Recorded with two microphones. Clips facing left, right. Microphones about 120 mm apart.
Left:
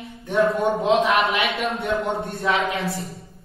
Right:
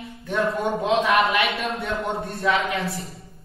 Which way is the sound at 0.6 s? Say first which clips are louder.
Left 3 dB; 30° left (ahead or behind).